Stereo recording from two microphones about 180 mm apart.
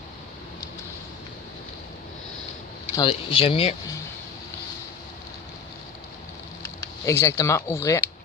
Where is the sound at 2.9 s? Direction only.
25° left (ahead or behind).